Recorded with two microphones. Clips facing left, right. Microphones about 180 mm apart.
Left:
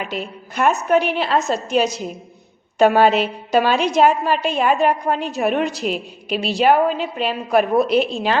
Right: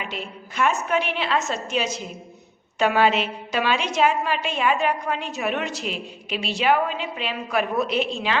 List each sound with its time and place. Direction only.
0.0 s a woman's voice: 40° left (ahead or behind)